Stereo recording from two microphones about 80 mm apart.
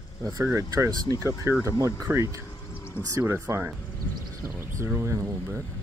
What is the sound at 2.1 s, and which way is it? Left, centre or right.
Speech, right.